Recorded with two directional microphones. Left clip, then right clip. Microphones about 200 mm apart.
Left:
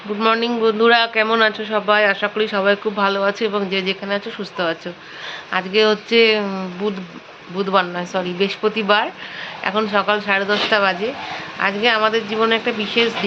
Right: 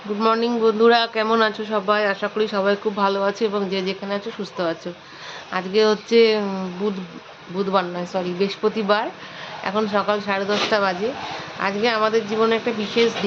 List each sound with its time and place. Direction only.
0.2 s a man's voice: 5° right (ahead or behind)